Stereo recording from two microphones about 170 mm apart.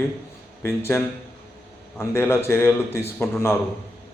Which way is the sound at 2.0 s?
15° left (ahead or behind).